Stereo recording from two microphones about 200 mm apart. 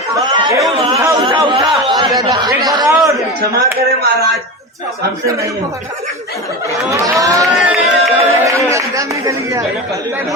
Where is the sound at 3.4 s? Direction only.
50° right (ahead or behind).